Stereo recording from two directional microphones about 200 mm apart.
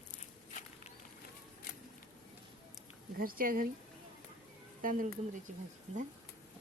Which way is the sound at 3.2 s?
45° right (ahead or behind).